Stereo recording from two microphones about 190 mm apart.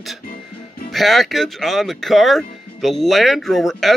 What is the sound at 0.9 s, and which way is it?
Speech, centre (ahead or behind).